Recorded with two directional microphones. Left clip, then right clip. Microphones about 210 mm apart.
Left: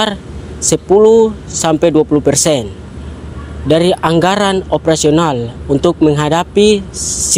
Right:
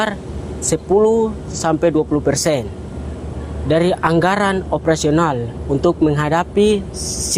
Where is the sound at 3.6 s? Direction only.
40° left (ahead or behind).